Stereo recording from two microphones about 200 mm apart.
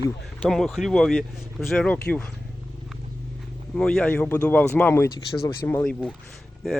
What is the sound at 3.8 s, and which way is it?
Speech, 5° left (ahead or behind).